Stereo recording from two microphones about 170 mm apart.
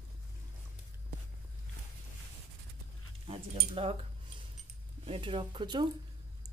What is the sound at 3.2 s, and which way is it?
Speech, 35° right (ahead or behind).